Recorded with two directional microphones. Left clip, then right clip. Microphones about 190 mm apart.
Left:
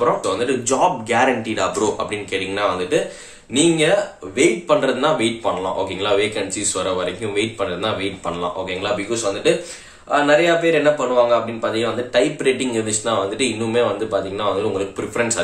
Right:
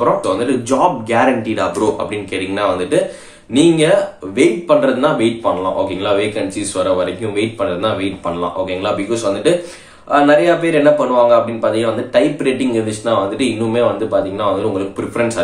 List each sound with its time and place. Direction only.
0.0 s speech: 5° left (ahead or behind)